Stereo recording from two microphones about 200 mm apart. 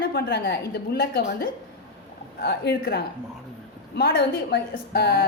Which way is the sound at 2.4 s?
55° left (ahead or behind).